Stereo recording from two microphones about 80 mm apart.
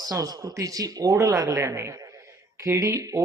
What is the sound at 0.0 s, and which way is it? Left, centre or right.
Speech, right.